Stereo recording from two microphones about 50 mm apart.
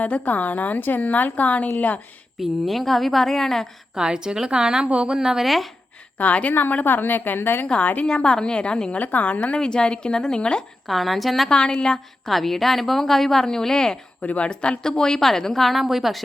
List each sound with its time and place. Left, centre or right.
0.0 s a woman's voice: left
2.4 s a woman's voice: centre
3.9 s a woman's voice: centre
4.9 s a woman's voice: right
5.1 s a woman's voice: centre
6.1 s a woman's voice: left
8.0 s a woman's voice: centre
9.0 s a woman's voice: left
9.6 s a woman's voice: centre
10.8 s a woman's voice: centre
11.4 s a woman's voice: centre
14.3 s a woman's voice: left; by 16.2 s centre